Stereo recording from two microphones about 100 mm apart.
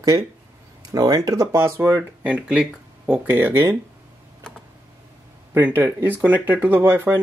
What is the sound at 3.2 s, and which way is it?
Speech, 20° right (ahead or behind).